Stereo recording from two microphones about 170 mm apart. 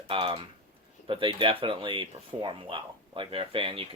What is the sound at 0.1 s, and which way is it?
Speech, 30° right (ahead or behind).